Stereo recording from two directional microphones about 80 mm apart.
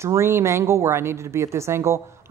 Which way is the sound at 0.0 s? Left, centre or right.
Right.